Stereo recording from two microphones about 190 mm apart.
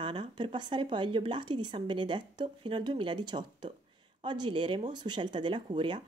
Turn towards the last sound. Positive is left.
turn(degrees=-25)  # may be behind; listen again after turning